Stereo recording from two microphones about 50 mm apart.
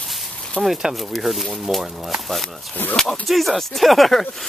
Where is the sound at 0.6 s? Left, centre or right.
Centre.